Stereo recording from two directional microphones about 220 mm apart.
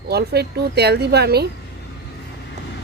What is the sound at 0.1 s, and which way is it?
Speech, 45° right (ahead or behind).